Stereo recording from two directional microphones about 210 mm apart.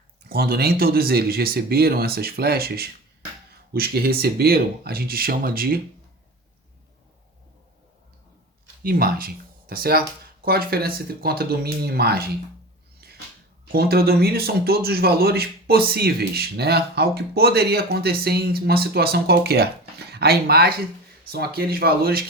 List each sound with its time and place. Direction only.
0.3 s speech: 50° right (ahead or behind)
8.8 s speech: 45° right (ahead or behind)
13.0 s cupboard open or close: 45° right (ahead or behind)
13.7 s speech: 50° right (ahead or behind)